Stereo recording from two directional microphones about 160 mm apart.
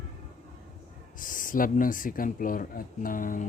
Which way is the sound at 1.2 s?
55° left (ahead or behind).